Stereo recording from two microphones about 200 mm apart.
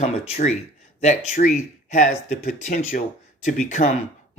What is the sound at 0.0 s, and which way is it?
Speech, 35° left (ahead or behind).